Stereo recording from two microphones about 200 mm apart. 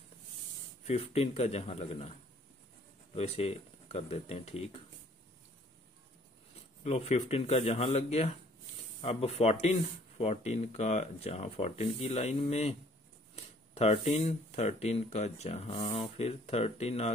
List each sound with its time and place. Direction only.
0.8 s speech: 30° left (ahead or behind)
3.2 s speech: 30° left (ahead or behind)
6.8 s speech: 35° left (ahead or behind)
13.7 s speech: 30° left (ahead or behind)